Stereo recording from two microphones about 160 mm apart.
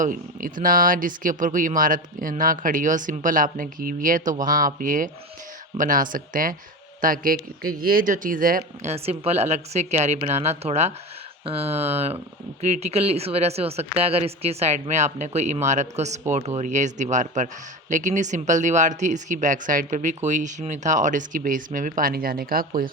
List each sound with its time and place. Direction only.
0.0 s speech: 60° right (ahead or behind)
8.9 s speech: 40° right (ahead or behind); by 22.9 s 65° right (ahead or behind)